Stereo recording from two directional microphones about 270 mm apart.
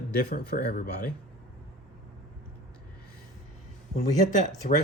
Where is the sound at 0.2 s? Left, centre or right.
Left.